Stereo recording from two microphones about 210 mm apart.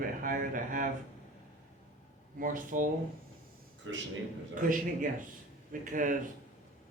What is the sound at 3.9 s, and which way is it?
Speech, 65° right (ahead or behind).